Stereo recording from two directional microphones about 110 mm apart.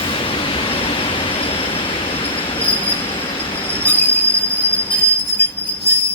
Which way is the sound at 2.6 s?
60° left (ahead or behind).